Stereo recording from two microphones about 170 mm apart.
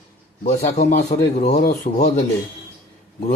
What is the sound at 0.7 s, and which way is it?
A man's voice, 40° left (ahead or behind).